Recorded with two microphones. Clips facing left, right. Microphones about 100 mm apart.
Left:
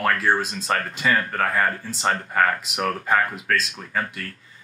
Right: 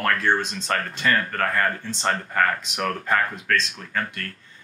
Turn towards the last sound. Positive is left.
turn(degrees=5)  # may be behind; listen again after turning